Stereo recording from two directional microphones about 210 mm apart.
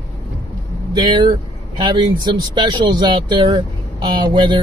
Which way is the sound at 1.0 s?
20° right (ahead or behind).